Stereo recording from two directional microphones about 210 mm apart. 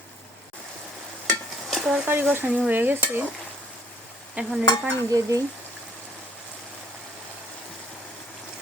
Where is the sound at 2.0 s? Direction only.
10° right (ahead or behind).